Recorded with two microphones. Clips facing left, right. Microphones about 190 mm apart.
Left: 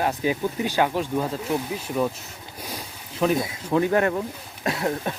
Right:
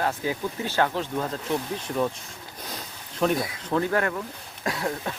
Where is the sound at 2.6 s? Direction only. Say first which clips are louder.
Left 3 dB; 10° left (ahead or behind).